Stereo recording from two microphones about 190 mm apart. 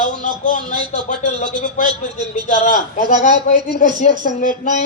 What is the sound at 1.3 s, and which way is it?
A woman's voice, 35° left (ahead or behind).